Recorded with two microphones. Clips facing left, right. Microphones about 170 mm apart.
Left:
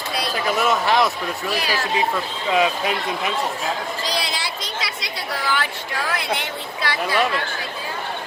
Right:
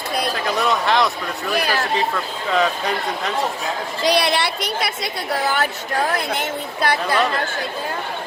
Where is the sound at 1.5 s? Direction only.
55° right (ahead or behind).